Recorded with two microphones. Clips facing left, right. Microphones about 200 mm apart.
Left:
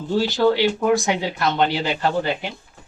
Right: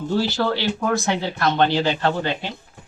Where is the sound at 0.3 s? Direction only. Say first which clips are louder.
Left 5 dB; 15° left (ahead or behind).